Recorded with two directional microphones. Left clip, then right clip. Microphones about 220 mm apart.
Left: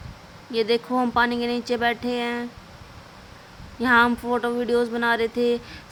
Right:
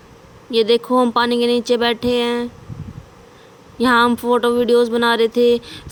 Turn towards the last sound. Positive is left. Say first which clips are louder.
# right 8 dB
turn(degrees=-20)  # may be behind; listen again after turning